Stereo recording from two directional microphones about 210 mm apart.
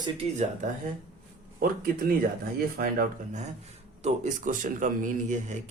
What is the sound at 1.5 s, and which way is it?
A man's voice, 40° right (ahead or behind).